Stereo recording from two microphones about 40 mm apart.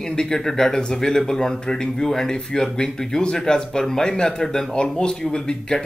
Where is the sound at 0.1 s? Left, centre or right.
Left.